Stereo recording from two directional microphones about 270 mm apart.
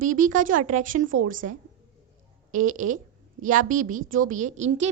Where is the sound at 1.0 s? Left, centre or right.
Right.